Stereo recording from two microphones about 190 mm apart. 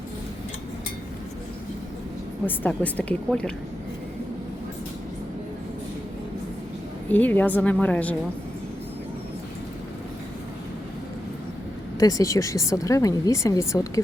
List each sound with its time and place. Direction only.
2.5 s a woman's voice: 5° left (ahead or behind)
7.1 s a woman's voice: 10° left (ahead or behind)
11.9 s a woman's voice: 20° left (ahead or behind)